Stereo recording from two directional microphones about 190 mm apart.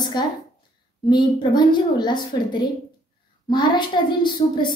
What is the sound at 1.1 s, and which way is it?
A woman's voice, 25° left (ahead or behind).